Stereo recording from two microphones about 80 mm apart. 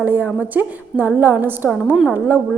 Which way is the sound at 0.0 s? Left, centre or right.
Right.